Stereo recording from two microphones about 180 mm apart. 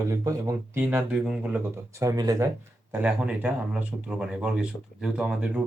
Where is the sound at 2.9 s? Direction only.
10° right (ahead or behind).